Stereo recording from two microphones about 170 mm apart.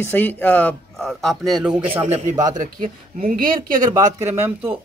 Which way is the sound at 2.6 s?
55° right (ahead or behind).